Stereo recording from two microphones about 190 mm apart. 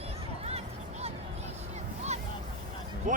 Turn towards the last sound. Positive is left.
turn(degrees=-40)  # may be behind; listen again after turning